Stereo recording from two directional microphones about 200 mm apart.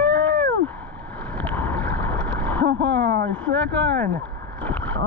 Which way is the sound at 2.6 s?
60° right (ahead or behind).